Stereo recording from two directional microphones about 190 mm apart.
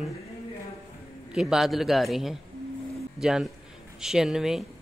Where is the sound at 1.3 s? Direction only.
Centre (ahead or behind).